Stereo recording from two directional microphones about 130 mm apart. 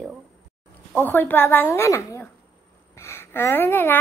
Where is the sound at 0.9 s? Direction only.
15° left (ahead or behind).